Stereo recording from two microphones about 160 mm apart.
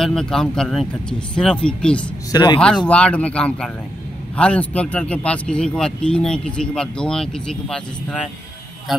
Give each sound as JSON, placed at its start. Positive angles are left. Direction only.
{"t": 0.0, "sound": "speech", "side_deg": 5}
{"t": 2.3, "sound": "speech", "side_deg": 25}
{"t": 2.9, "sound": "speech", "side_deg": 5}